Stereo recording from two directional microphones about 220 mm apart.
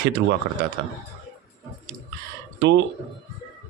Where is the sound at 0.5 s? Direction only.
45° right (ahead or behind).